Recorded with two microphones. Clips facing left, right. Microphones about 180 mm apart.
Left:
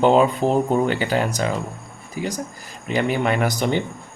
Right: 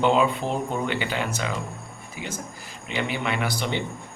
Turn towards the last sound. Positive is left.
turn(degrees=45)  # may be behind; listen again after turning